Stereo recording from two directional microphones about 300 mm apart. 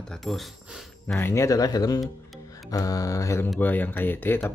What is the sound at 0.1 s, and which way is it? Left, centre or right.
Speech, centre.